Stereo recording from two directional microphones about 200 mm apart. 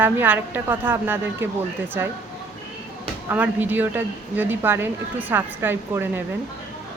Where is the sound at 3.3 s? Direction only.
10° right (ahead or behind).